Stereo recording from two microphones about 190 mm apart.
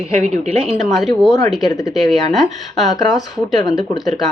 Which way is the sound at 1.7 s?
20° left (ahead or behind).